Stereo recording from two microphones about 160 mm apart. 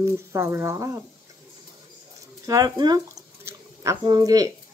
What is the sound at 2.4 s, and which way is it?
Speech, 25° right (ahead or behind).